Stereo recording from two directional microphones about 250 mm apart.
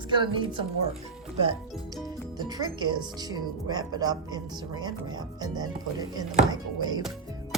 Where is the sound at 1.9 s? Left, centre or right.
Centre.